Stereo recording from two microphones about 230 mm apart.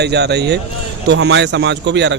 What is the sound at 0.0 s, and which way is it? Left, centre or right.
A man's voice, right.